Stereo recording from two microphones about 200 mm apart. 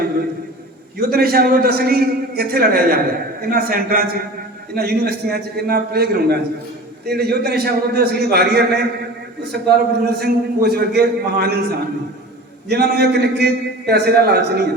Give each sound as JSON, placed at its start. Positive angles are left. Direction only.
{"t": 0.9, "sound": "a man's voice", "side_deg": -50}
{"t": 12.6, "sound": "a man's voice", "side_deg": -55}